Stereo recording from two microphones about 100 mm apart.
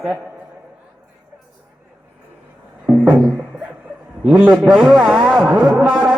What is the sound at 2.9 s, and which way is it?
Music, 15° right (ahead or behind).